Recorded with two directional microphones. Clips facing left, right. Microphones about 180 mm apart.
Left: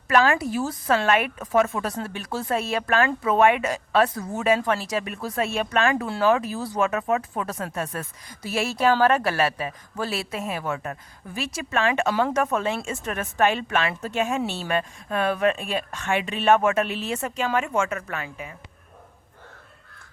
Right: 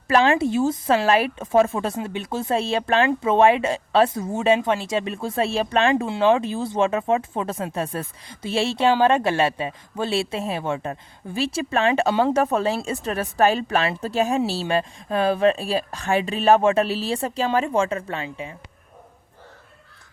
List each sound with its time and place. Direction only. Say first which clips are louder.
0.1 s a woman's voice: right 3 dB; 25° right (ahead or behind)